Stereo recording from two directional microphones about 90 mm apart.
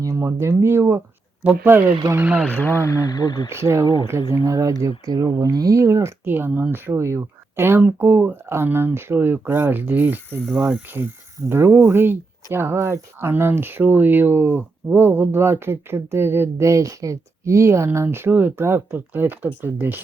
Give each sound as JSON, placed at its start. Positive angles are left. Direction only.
{"t": 0.0, "sound": "speech", "side_deg": -35}
{"t": 2.5, "sound": "speech", "side_deg": 20}
{"t": 3.5, "sound": "speech", "side_deg": -30}
{"t": 10.4, "sound": "speech", "side_deg": -5}
{"t": 11.4, "sound": "speech", "side_deg": -30}